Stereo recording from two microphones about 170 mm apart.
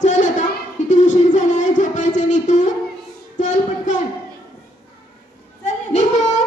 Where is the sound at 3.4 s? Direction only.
45° left (ahead or behind).